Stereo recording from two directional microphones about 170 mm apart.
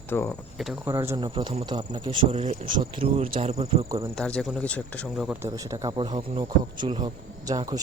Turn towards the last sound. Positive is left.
turn(degrees=-20)  # may be behind; listen again after turning